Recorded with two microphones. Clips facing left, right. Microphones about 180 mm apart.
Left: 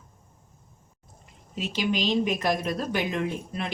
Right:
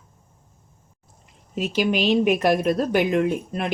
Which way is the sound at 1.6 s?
45° right (ahead or behind).